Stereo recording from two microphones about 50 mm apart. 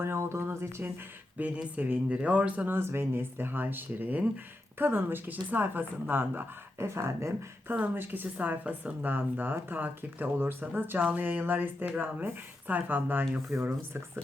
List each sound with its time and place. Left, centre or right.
0.0 s a sound: right
1.5 s speech: right
2.6 s speech: right
6.7 s speech: right
7.9 s speech: right
9.1 s speech: right